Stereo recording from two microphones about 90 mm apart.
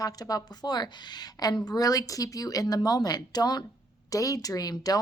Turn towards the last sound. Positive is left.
turn(degrees=45)  # may be behind; listen again after turning